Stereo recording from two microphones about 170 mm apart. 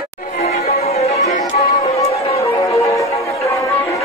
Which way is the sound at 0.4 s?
40° left (ahead or behind).